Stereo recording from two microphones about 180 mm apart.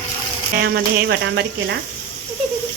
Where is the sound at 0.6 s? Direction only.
70° right (ahead or behind).